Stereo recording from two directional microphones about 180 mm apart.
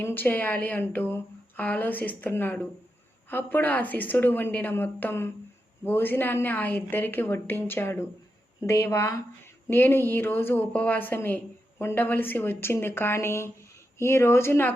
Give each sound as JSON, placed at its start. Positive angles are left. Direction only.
{"t": 0.0, "sound": "a woman's voice", "side_deg": 10}